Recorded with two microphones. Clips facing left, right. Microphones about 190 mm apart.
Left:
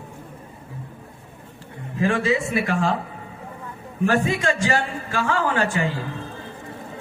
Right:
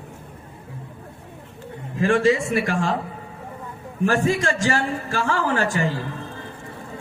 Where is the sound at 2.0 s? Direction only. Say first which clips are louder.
Right 3 dB; 45° right (ahead or behind).